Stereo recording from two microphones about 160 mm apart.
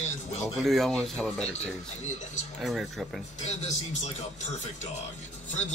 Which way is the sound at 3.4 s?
45° left (ahead or behind).